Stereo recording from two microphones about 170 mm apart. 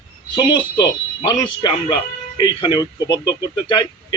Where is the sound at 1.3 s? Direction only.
25° left (ahead or behind).